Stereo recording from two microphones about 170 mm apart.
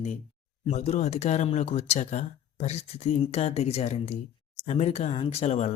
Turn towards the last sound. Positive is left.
turn(degrees=40)  # may be behind; listen again after turning